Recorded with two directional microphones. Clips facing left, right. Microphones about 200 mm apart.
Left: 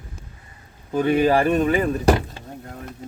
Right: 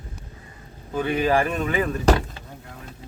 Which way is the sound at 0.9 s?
40° left (ahead or behind).